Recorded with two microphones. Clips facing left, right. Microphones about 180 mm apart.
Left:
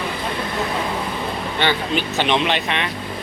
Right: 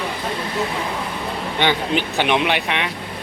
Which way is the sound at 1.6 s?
15° right (ahead or behind).